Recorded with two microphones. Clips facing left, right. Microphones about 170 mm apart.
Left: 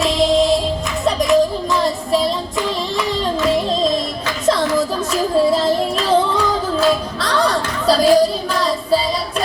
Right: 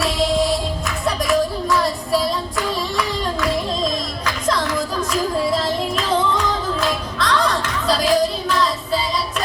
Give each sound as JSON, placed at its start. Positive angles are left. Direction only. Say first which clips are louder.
{"t": 1.0, "sound": "child singing", "louder": "left 5 dB", "side_deg": 20}
{"t": 4.4, "sound": "music", "louder": "left 6 dB", "side_deg": 25}